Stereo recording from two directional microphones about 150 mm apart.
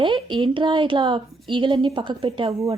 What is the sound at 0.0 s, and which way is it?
Speech, 35° right (ahead or behind).